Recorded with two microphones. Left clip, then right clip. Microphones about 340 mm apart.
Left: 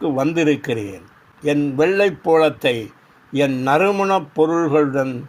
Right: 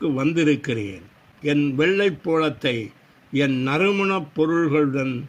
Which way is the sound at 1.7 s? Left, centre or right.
Left.